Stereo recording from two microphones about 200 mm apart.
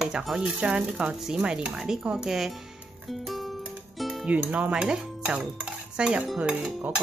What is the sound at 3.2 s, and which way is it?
Music, centre (ahead or behind).